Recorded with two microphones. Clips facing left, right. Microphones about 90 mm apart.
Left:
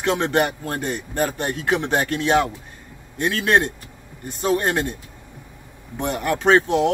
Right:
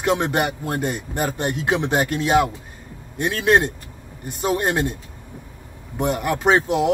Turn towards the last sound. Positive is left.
turn(degrees=-5)  # may be behind; listen again after turning